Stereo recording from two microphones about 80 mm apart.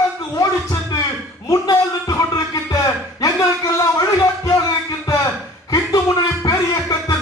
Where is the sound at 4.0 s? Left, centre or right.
Left.